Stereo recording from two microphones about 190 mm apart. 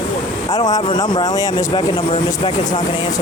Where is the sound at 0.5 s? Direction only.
20° left (ahead or behind).